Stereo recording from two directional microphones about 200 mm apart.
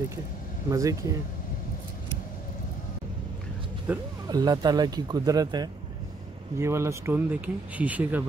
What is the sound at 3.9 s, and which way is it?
Speech, 5° right (ahead or behind).